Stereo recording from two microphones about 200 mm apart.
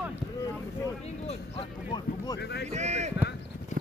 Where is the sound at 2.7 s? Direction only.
35° right (ahead or behind).